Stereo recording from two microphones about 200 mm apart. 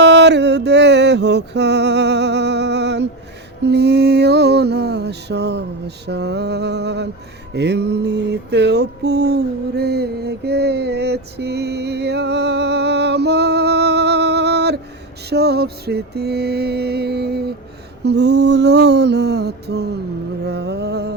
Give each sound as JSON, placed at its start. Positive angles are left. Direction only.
{"t": 0.0, "sound": "music", "side_deg": -60}
{"t": 6.1, "sound": "mantra", "side_deg": -55}
{"t": 18.0, "sound": "a sound", "side_deg": -55}
{"t": 20.4, "sound": "music", "side_deg": -55}